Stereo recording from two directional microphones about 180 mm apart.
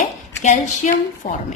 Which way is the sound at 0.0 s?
40° left (ahead or behind).